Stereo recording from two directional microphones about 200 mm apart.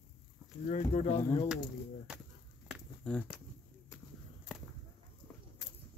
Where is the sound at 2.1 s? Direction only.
5° right (ahead or behind).